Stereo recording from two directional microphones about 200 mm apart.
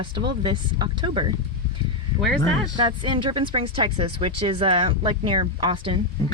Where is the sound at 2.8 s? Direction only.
25° right (ahead or behind).